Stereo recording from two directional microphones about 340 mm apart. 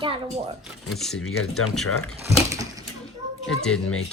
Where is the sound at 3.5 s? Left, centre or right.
Centre.